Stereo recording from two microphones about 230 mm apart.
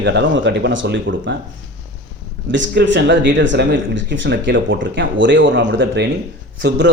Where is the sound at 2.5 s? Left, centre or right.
Right.